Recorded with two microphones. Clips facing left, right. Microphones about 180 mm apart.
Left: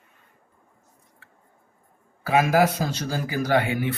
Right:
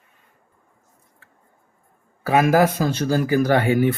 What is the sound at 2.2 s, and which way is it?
Speech, 50° right (ahead or behind).